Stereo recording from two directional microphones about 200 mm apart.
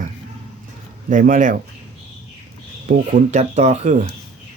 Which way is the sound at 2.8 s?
40° right (ahead or behind).